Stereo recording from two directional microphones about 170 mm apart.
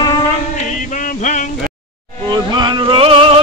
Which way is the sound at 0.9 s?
50° left (ahead or behind).